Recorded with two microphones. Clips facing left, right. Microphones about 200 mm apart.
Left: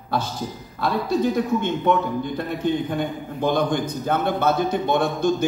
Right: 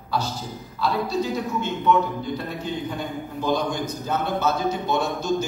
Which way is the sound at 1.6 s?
55° left (ahead or behind).